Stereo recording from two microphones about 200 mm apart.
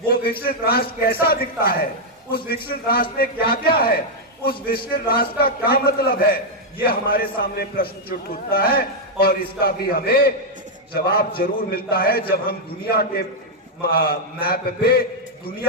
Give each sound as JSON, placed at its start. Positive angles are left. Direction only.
{"t": 0.1, "sound": "a man's voice", "side_deg": 50}